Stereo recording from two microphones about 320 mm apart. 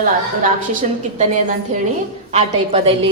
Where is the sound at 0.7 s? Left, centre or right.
Right.